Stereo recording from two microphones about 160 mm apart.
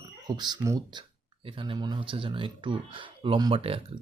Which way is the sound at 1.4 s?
35° right (ahead or behind).